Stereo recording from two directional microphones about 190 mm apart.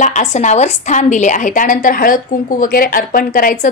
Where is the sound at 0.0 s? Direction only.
40° left (ahead or behind).